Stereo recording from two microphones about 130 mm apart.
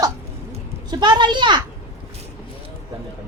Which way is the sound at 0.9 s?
35° right (ahead or behind).